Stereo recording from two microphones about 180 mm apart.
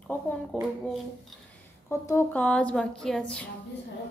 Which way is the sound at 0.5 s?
5° left (ahead or behind).